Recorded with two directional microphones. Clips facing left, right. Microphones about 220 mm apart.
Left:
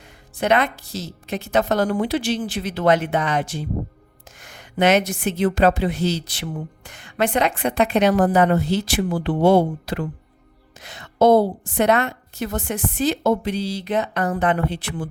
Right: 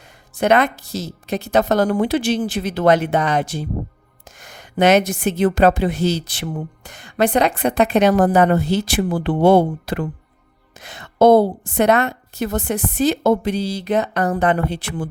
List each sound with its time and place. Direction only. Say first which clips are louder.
0.3 s a woman's voice: right 3 dB; 45° right (ahead or behind)